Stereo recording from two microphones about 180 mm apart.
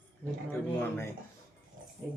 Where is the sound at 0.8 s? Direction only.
15° left (ahead or behind).